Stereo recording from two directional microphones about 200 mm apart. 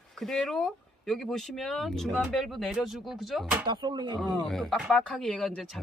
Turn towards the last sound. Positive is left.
turn(degrees=5)  # may be behind; listen again after turning